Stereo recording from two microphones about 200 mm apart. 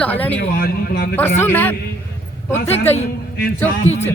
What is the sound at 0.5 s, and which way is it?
Speech, 50° left (ahead or behind).